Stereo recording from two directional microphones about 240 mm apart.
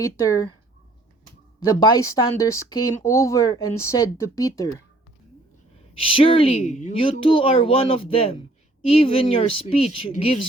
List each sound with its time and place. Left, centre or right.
0.0 s speech: centre
1.7 s speech: centre
6.0 s speech: left